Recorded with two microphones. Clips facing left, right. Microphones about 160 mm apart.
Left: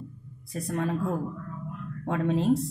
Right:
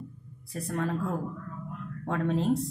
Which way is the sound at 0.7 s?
20° left (ahead or behind).